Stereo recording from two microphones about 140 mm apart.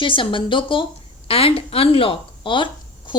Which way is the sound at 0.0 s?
35° left (ahead or behind).